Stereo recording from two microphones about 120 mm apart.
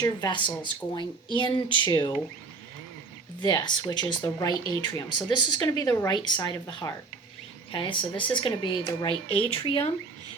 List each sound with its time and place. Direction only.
0.0 s speech: 40° left (ahead or behind)
3.4 s speech: 35° left (ahead or behind)